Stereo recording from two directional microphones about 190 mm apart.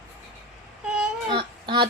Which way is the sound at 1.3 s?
25° right (ahead or behind).